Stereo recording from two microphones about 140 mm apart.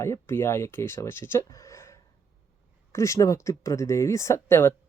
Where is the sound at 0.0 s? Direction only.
20° left (ahead or behind).